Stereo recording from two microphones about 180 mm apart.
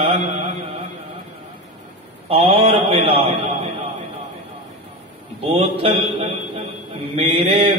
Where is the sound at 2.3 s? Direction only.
30° right (ahead or behind).